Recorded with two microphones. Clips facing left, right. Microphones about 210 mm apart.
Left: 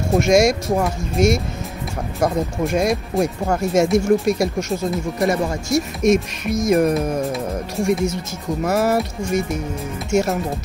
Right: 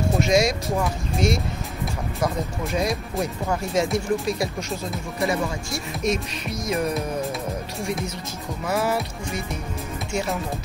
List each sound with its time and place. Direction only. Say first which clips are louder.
0.3 s speech: left 7 dB; 45° left (ahead or behind)